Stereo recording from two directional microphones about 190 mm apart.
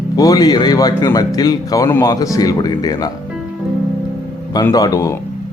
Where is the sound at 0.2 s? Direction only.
20° left (ahead or behind).